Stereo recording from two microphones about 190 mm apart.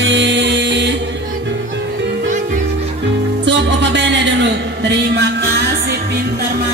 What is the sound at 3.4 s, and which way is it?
Music, 70° right (ahead or behind).